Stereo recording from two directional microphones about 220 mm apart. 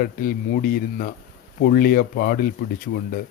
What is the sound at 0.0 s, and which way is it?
Speech, 40° left (ahead or behind).